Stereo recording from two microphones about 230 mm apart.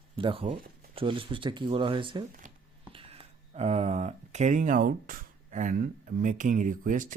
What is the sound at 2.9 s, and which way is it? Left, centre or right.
A man's voice, right.